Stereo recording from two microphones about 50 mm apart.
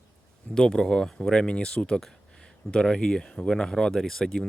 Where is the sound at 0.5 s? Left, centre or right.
Centre.